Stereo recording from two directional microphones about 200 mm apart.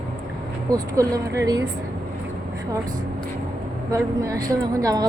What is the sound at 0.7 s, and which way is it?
Speech, 15° right (ahead or behind).